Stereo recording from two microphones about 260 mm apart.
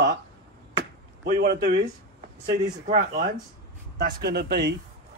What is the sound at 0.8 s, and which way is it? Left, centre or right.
Chop, right.